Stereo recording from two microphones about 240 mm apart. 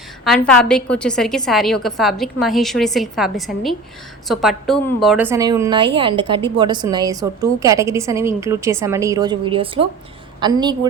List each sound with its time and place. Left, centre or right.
0.3 s a woman's voice: centre